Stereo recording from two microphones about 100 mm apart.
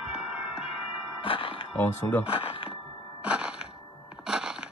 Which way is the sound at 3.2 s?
10° right (ahead or behind).